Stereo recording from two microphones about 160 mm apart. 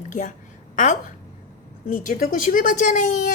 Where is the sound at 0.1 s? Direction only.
50° left (ahead or behind).